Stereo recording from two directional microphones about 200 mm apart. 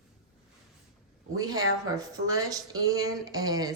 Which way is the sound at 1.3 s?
15° right (ahead or behind).